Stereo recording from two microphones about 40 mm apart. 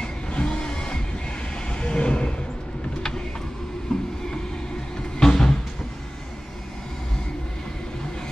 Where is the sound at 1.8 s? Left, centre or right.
Left.